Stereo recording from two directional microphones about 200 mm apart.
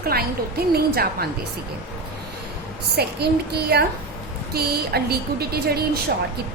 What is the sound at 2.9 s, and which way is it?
A woman's voice, 55° right (ahead or behind).